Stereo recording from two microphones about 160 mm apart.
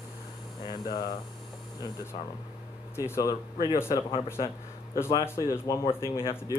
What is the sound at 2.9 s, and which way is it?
Speech, 15° left (ahead or behind).